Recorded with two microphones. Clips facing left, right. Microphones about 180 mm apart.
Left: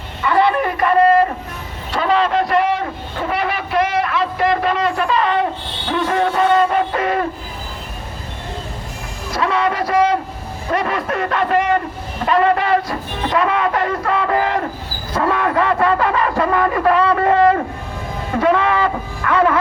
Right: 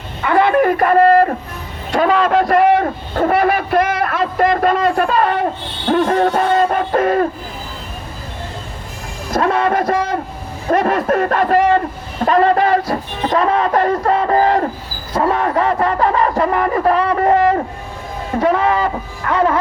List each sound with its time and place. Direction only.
0.3 s a sound: 50° right (ahead or behind)
9.3 s a sound: 50° right (ahead or behind)
10.7 s a man's voice: 45° right (ahead or behind); by 17.0 s 30° right (ahead or behind)
17.3 s vehicle: 20° right (ahead or behind)
18.3 s speech: 35° right (ahead or behind)
19.2 s vehicle: 30° right (ahead or behind)